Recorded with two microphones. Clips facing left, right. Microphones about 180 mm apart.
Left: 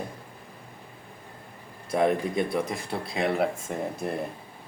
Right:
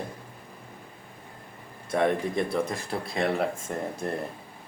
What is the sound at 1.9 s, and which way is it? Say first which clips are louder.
Speech: left 1 dB; 5° left (ahead or behind).